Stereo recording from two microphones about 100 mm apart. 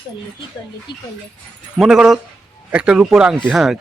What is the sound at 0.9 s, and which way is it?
Speech, 50° left (ahead or behind).